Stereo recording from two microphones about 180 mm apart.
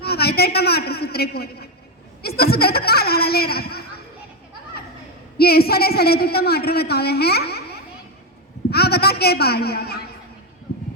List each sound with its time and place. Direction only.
0.0 s a woman's voice: 60° left (ahead or behind)
5.4 s a woman's voice: 60° left (ahead or behind)